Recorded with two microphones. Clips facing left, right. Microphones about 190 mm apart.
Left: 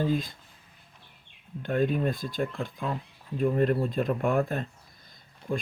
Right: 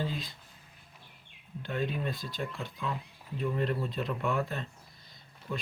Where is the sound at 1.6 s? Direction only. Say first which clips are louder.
Left 7 dB; 50° left (ahead or behind).